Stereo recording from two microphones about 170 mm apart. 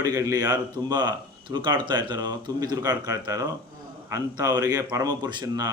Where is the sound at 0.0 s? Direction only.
20° right (ahead or behind).